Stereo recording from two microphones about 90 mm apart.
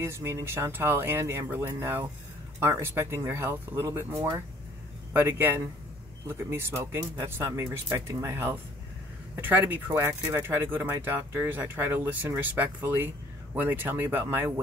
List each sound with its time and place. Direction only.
0.0 s speech: 30° right (ahead or behind)